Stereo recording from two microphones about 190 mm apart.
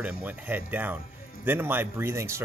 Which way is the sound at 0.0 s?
10° right (ahead or behind).